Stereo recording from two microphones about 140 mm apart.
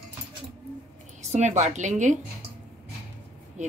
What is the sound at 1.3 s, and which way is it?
Speech, 55° right (ahead or behind).